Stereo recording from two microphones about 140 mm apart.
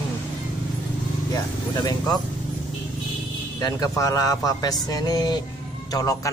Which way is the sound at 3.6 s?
25° left (ahead or behind).